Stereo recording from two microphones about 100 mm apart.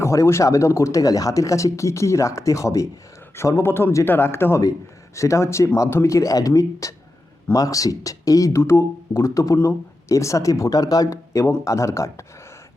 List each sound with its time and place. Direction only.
0.0 s speech: 30° left (ahead or behind)